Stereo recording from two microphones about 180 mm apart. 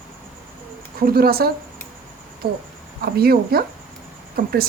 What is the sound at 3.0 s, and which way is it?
Speech, 60° right (ahead or behind).